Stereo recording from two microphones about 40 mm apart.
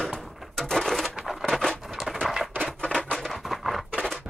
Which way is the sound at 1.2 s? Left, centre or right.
Centre.